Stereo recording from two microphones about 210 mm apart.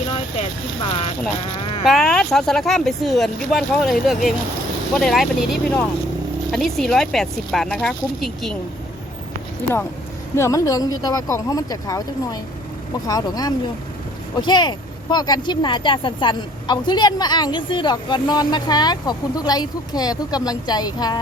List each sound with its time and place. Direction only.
0.3 s speech: 25° left (ahead or behind)
1.9 s speech: centre (ahead or behind)
10.3 s speech: 15° left (ahead or behind)